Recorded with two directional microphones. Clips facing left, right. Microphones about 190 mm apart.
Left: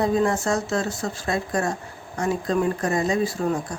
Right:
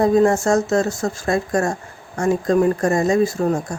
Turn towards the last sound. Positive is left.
turn(degrees=-45)  # may be behind; listen again after turning